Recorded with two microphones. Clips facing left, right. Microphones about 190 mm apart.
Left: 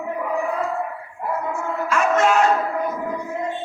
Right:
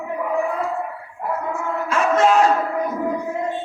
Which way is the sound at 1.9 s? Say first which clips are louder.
Right 2 dB; 30° right (ahead or behind).